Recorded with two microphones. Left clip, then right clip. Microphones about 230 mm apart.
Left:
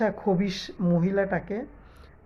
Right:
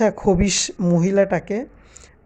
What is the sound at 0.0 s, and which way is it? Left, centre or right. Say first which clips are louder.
Speech: right 8 dB; right.